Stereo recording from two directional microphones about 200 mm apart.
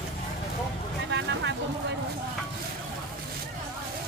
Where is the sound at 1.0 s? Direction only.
60° right (ahead or behind).